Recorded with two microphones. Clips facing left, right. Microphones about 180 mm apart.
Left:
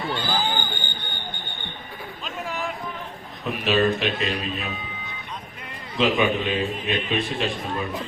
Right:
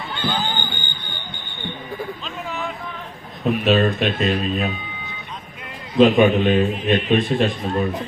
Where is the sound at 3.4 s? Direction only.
55° right (ahead or behind).